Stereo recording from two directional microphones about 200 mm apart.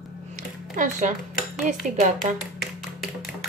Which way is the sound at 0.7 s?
40° right (ahead or behind).